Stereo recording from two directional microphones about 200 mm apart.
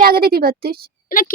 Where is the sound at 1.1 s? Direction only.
45° left (ahead or behind).